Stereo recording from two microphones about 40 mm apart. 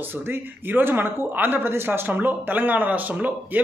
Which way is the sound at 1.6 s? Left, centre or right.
Right.